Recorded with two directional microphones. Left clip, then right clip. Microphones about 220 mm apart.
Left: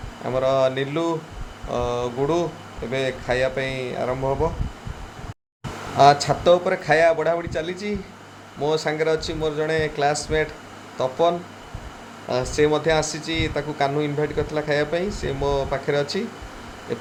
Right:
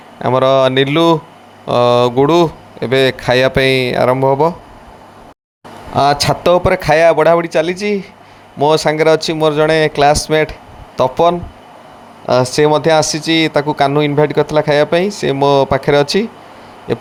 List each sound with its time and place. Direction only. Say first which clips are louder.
0.2 s speech: right 9 dB; 40° right (ahead or behind)
6.0 s speech: right 3 dB; 45° right (ahead or behind)